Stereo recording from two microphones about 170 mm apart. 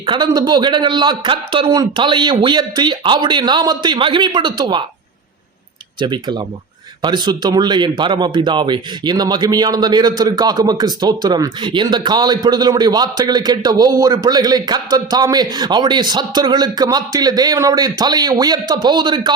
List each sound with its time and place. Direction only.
0.0 s speech: 25° right (ahead or behind)
6.0 s speech: 25° right (ahead or behind)